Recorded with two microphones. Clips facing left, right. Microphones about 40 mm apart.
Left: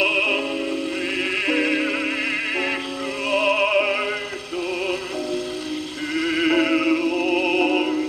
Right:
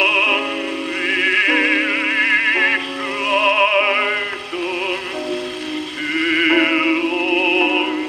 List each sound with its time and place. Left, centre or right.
0.0 s music: right
6.1 s music: right